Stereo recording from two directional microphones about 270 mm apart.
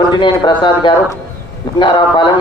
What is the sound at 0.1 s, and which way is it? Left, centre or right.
A man's voice, centre.